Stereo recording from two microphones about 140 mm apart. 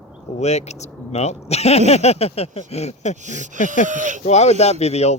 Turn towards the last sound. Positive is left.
turn(degrees=50)  # may be behind; listen again after turning